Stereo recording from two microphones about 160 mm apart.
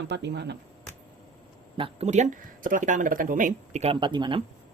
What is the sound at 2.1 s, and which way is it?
Speech, 50° right (ahead or behind).